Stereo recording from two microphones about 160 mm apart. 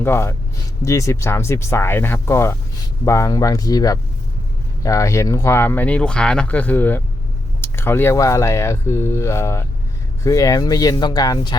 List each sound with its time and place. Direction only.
0.0 s speech: 15° left (ahead or behind)